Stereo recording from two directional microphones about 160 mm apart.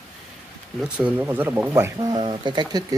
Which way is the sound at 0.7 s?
10° right (ahead or behind).